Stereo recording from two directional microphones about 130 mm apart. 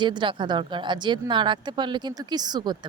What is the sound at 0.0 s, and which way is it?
Speech, 35° right (ahead or behind).